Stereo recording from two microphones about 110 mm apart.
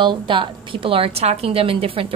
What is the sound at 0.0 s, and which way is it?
A woman's voice, 50° right (ahead or behind).